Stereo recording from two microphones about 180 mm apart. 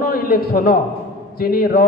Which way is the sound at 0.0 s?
55° left (ahead or behind).